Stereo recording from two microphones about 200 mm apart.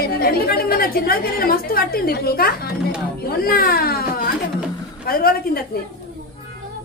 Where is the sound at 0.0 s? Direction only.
50° left (ahead or behind).